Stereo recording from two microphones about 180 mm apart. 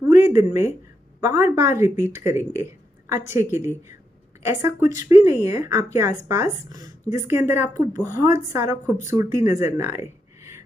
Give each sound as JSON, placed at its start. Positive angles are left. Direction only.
{"t": 0.0, "sound": "a sound", "side_deg": -15}
{"t": 1.2, "sound": "speech", "side_deg": -15}
{"t": 4.5, "sound": "speech", "side_deg": -15}